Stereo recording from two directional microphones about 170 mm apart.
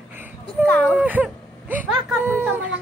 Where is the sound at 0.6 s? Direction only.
10° left (ahead or behind).